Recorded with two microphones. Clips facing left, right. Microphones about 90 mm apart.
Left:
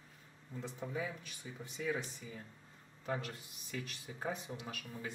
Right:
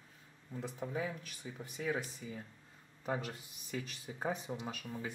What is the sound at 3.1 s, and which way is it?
Speech, 15° right (ahead or behind).